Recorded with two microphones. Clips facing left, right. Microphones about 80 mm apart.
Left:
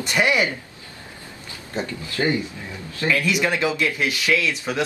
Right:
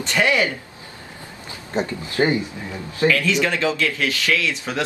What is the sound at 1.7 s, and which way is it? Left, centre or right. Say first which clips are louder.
Speech: right 4 dB; right.